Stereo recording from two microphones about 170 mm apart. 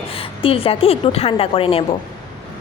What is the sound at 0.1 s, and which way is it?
A woman's voice, 35° left (ahead or behind).